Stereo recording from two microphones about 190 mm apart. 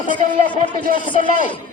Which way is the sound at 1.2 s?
45° right (ahead or behind).